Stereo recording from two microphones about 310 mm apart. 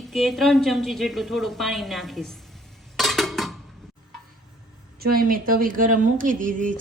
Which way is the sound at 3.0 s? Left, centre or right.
Centre.